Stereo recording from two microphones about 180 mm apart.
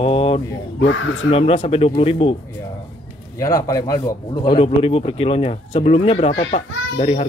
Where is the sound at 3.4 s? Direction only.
20° left (ahead or behind); by 7.3 s 35° left (ahead or behind).